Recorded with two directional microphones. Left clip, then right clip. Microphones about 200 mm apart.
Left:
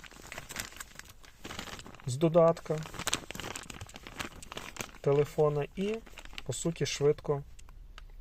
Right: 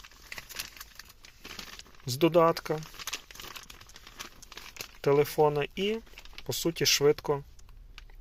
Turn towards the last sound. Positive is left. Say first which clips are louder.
# right 4 dB
turn(degrees=0)  # may be behind; listen again after turning